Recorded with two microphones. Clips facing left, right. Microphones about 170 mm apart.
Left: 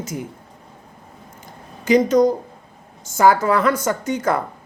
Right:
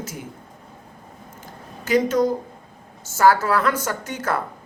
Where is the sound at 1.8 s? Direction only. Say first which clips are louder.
Left 4 dB; 5° right (ahead or behind).